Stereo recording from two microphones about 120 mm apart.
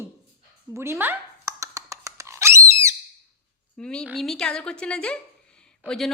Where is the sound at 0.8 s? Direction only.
20° right (ahead or behind).